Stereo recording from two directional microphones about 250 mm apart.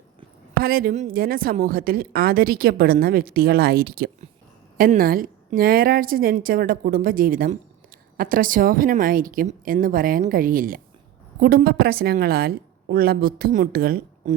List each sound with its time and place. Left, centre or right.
0.6 s a woman's voice: right